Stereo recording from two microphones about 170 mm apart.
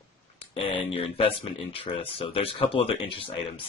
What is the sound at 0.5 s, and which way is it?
Speech, 35° left (ahead or behind).